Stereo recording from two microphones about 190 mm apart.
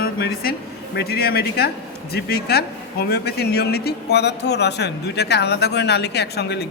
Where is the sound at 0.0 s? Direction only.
55° left (ahead or behind).